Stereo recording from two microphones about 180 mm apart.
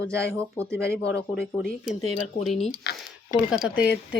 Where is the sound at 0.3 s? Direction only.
15° right (ahead or behind).